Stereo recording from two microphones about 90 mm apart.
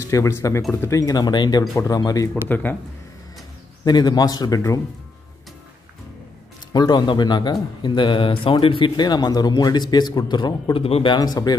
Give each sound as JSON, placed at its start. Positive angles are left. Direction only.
{"t": 0.1, "sound": "a man's voice", "side_deg": 35}
{"t": 2.2, "sound": "speech", "side_deg": 20}
{"t": 3.8, "sound": "a man's voice", "side_deg": 50}
{"t": 6.7, "sound": "speech", "side_deg": 50}
{"t": 11.1, "sound": "a man's voice", "side_deg": 45}